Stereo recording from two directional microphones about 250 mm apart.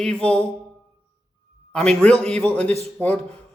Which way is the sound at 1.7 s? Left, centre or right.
Centre.